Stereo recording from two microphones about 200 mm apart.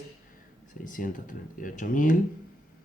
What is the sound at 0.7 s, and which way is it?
Speech, 40° left (ahead or behind).